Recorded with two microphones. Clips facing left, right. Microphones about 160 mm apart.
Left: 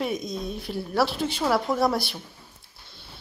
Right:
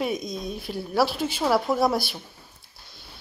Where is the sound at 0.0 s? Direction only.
Centre (ahead or behind).